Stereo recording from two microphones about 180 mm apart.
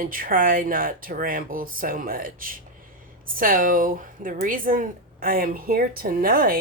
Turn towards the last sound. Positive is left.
turn(degrees=-55)  # may be behind; listen again after turning